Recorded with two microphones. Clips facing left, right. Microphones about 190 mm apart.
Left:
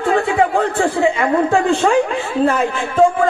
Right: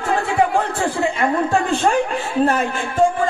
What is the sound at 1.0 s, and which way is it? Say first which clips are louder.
A woman's voice: left 3 dB; 60° left (ahead or behind).